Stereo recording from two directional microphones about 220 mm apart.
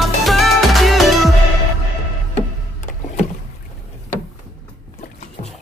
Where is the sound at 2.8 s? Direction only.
30° left (ahead or behind).